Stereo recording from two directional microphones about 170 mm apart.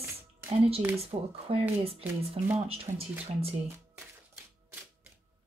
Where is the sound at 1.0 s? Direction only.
35° right (ahead or behind).